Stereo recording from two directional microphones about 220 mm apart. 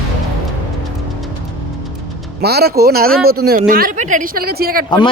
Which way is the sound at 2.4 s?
45° right (ahead or behind).